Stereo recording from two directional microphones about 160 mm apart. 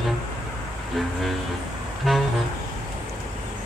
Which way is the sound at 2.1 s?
Centre (ahead or behind).